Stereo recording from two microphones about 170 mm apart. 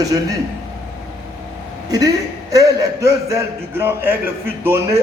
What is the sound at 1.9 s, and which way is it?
A man's voice, 20° right (ahead or behind).